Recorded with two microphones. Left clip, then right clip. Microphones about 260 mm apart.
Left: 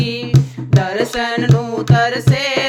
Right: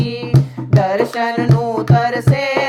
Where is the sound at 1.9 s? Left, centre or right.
Left.